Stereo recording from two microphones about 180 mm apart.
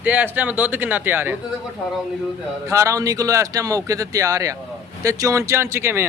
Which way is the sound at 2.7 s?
15° right (ahead or behind).